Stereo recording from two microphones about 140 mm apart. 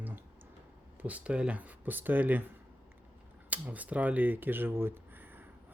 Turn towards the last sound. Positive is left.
turn(degrees=-15)  # may be behind; listen again after turning